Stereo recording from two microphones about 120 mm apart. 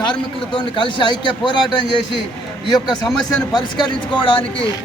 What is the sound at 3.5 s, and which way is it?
Speech, 40° left (ahead or behind).